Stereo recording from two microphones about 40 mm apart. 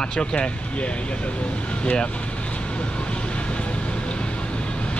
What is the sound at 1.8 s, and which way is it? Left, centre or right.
Speech, left.